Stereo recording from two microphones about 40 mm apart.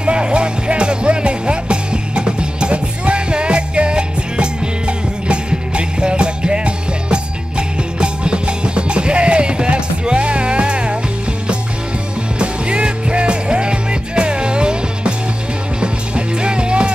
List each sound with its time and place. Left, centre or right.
0.0 s music: right
12.4 s music: right